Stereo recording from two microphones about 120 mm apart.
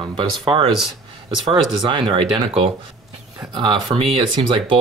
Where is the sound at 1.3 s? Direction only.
40° right (ahead or behind).